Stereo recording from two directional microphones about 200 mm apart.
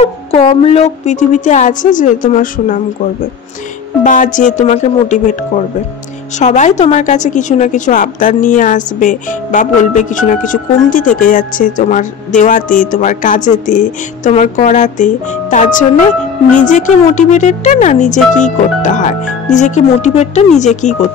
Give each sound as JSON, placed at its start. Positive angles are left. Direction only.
{"t": 0.0, "sound": "a woman's voice", "side_deg": 30}
{"t": 4.0, "sound": "a woman's voice", "side_deg": 40}
{"t": 6.4, "sound": "a woman's voice", "side_deg": 35}